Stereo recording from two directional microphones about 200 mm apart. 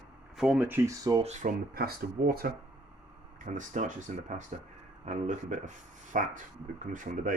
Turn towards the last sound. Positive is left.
turn(degrees=-40)  # may be behind; listen again after turning